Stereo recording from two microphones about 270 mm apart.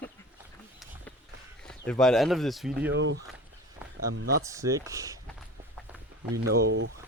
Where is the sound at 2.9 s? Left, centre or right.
Right.